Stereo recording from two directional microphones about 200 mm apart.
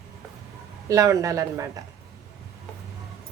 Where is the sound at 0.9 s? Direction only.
15° right (ahead or behind).